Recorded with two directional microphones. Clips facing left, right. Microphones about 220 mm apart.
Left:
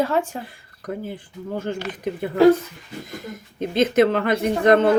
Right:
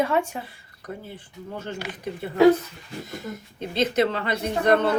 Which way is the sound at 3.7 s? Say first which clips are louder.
Left 5 dB; 50° left (ahead or behind).